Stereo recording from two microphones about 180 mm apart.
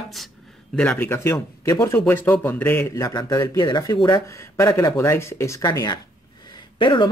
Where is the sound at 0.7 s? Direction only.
5° left (ahead or behind).